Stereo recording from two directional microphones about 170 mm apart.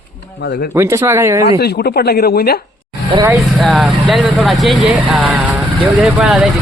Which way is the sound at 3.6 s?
Centre (ahead or behind).